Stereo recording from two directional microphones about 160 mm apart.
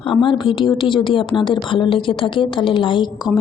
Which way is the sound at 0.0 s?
30° left (ahead or behind).